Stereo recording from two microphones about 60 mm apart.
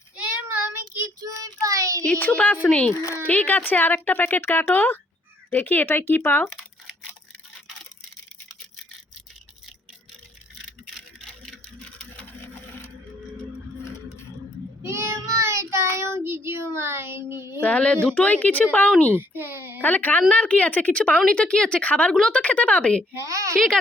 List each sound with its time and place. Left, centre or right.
1.2 s child singing: right
2.1 s speech: left
2.9 s speech: left
3.2 s speech: left
14.8 s child singing: right
17.6 s speech: left
19.1 s a child's voice: right
19.8 s speech: left
23.2 s a child's voice: right